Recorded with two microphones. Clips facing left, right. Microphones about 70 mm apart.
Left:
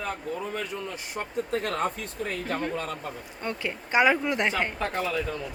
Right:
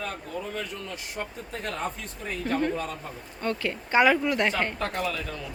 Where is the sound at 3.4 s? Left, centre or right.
Centre.